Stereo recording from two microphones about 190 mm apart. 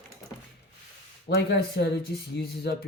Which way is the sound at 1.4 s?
60° left (ahead or behind).